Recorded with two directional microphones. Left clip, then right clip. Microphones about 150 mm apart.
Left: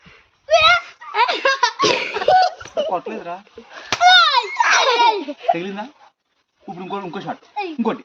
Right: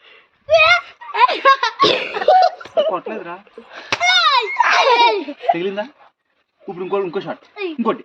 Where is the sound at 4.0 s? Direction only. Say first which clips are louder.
Left 2 dB; 10° left (ahead or behind).